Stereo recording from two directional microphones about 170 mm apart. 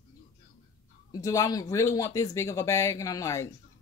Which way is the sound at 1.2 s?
20° left (ahead or behind).